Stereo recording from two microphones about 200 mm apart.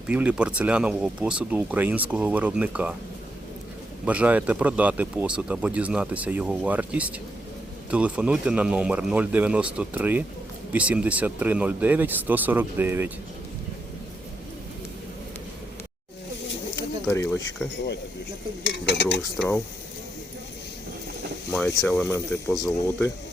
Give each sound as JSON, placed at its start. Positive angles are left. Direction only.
{"t": 0.1, "sound": "speech", "side_deg": -5}
{"t": 4.0, "sound": "speech", "side_deg": -5}
{"t": 17.1, "sound": "speech", "side_deg": 15}
{"t": 18.6, "sound": "stir", "side_deg": 60}
{"t": 19.4, "sound": "speech", "side_deg": 10}
{"t": 21.8, "sound": "speech", "side_deg": 10}